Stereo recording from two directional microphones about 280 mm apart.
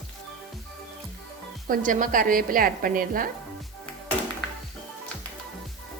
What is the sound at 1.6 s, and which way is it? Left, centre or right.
A woman's voice, right.